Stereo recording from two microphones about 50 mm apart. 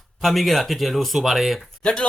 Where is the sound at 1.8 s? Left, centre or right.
Centre.